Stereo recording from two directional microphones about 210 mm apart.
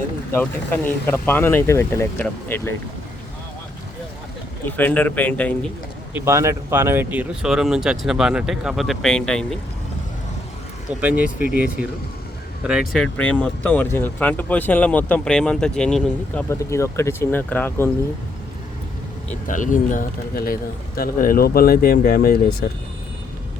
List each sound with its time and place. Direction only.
0.9 s speech: 10° left (ahead or behind)
4.6 s speech: 5° left (ahead or behind)
6.1 s speech: 15° right (ahead or behind); by 9.6 s 5° left (ahead or behind)
11.0 s speech: 5° right (ahead or behind)
12.9 s speech: 5° left (ahead or behind)
19.3 s speech: 40° left (ahead or behind)